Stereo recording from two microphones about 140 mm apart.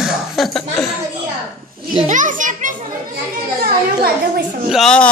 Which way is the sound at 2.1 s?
65° right (ahead or behind).